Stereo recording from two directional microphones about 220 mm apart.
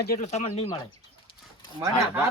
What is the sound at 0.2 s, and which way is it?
Speech, 30° left (ahead or behind).